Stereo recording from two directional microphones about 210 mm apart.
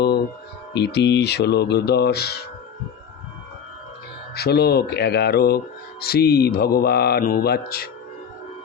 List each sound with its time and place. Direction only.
0.7 s speech: 55° left (ahead or behind)
4.4 s speech: 50° left (ahead or behind)